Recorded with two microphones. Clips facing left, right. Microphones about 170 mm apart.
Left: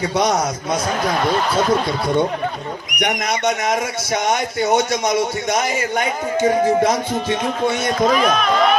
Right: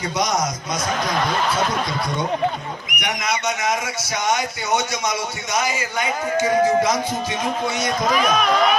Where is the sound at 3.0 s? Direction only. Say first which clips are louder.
Left 5 dB; 55° left (ahead or behind).